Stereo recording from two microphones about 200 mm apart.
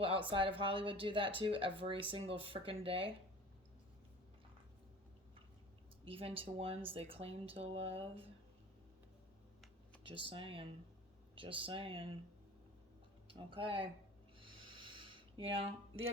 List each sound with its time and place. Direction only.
0.0 s speech: 25° right (ahead or behind)
6.1 s speech: 25° right (ahead or behind)
10.0 s speech: 25° right (ahead or behind)
13.2 s speech: 25° right (ahead or behind)
14.3 s a sound: 25° right (ahead or behind)
15.5 s speech: 25° right (ahead or behind)